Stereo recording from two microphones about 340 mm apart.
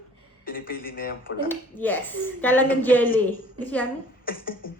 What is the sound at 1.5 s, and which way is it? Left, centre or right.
Speech, centre.